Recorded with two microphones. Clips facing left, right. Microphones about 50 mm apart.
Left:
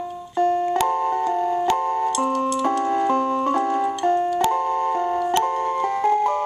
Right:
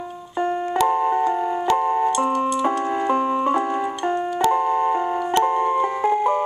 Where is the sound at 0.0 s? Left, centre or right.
Centre.